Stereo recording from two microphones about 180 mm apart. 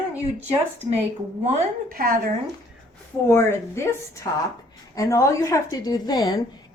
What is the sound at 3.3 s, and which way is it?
A woman's voice, 15° left (ahead or behind).